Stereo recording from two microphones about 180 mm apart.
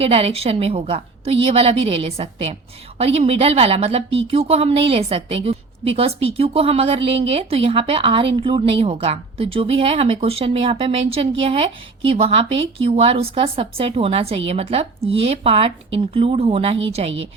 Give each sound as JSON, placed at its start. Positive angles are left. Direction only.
{"t": 0.0, "sound": "a woman's voice", "side_deg": -35}